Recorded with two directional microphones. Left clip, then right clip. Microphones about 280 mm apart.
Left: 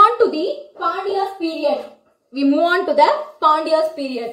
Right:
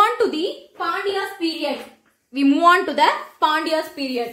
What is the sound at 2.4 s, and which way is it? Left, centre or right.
A woman's voice, centre.